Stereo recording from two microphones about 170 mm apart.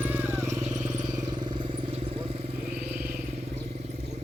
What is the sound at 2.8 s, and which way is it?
Vehicle, 10° right (ahead or behind).